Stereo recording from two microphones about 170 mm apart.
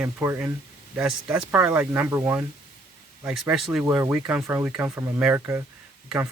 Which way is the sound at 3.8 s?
15° right (ahead or behind).